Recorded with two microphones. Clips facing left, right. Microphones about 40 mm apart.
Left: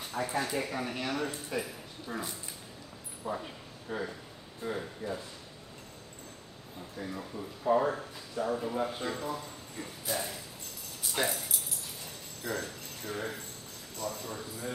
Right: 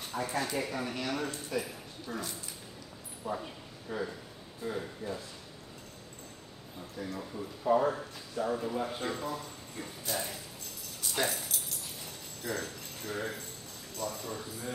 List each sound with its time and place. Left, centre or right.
0.1 s speech: centre
4.6 s speech: centre
7.0 s speech: centre
12.5 s speech: centre